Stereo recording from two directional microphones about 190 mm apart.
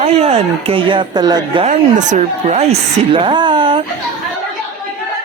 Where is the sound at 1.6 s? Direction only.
40° right (ahead or behind).